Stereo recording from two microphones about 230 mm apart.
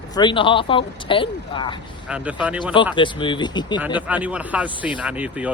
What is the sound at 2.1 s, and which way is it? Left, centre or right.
Speech, centre.